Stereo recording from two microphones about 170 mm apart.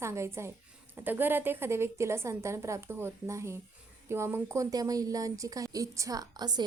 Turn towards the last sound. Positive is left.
turn(degrees=-25)  # may be behind; listen again after turning